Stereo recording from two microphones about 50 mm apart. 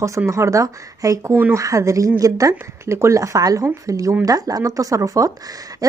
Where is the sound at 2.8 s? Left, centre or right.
Right.